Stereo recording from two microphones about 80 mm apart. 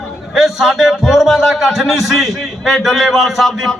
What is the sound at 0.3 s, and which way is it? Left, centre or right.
A man's voice, centre.